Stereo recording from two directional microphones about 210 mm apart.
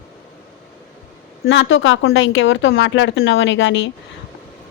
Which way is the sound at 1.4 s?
65° left (ahead or behind).